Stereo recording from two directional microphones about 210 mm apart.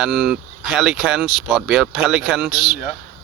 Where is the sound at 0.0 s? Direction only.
Centre (ahead or behind).